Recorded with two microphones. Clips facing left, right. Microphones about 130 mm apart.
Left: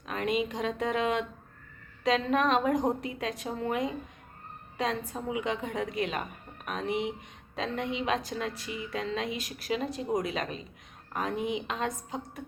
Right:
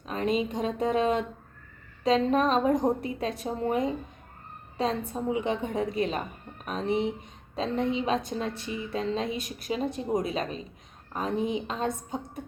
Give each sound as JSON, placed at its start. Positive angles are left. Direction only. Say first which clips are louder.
{"t": 0.1, "sound": "a woman's voice", "louder": "right 2 dB", "side_deg": -30}